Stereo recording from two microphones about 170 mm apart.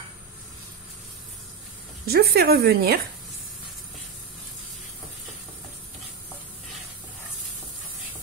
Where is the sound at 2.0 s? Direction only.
70° right (ahead or behind).